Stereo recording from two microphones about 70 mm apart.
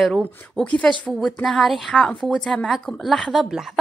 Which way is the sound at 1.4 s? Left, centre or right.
Centre.